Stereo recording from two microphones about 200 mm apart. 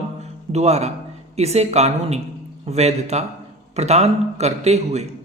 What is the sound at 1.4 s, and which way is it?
A man's voice, 30° right (ahead or behind).